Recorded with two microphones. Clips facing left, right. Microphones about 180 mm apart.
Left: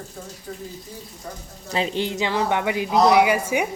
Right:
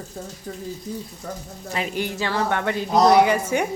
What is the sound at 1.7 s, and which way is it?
Speech, 30° left (ahead or behind).